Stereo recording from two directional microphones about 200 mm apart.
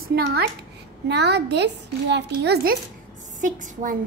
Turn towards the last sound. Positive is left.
turn(degrees=-40)  # may be behind; listen again after turning